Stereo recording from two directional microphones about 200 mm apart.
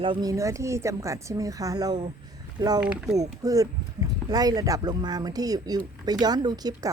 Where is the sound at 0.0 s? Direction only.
20° right (ahead or behind).